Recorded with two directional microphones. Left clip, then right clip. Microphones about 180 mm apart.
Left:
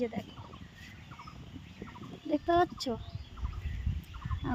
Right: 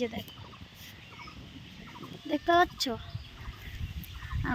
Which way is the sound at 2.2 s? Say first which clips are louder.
Right 3 dB; 10° right (ahead or behind).